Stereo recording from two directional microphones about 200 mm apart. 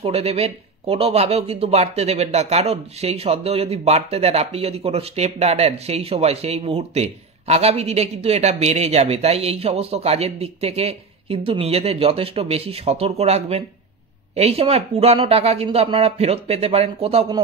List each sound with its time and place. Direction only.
0.0 s speech: 30° right (ahead or behind)